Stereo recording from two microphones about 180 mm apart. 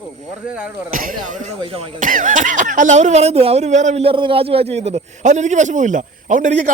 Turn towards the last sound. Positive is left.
turn(degrees=-45)  # may be behind; listen again after turning